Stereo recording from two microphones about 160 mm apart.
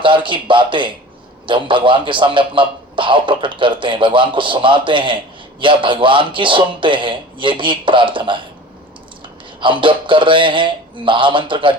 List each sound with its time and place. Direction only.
0.0 s a man's voice: 30° right (ahead or behind)
9.6 s a man's voice: 30° right (ahead or behind)